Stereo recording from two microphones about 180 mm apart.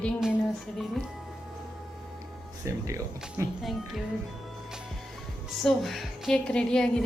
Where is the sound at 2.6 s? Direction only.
15° right (ahead or behind).